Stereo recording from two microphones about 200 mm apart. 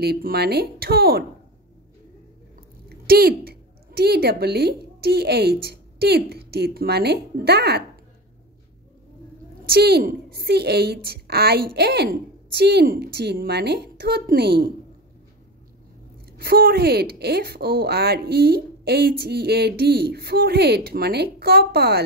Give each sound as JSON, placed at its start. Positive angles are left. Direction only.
{"t": 0.0, "sound": "a woman's voice", "side_deg": -50}
{"t": 3.1, "sound": "a woman's voice", "side_deg": -50}
{"t": 9.7, "sound": "a woman's voice", "side_deg": -55}
{"t": 16.3, "sound": "a woman's voice", "side_deg": -50}